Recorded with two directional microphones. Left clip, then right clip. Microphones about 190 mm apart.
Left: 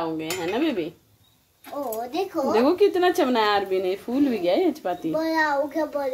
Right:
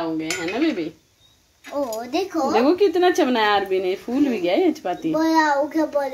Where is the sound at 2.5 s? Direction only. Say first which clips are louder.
Right 2 dB; centre (ahead or behind).